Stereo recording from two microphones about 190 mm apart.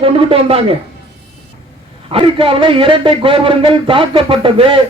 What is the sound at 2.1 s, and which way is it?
A man's voice, 30° right (ahead or behind).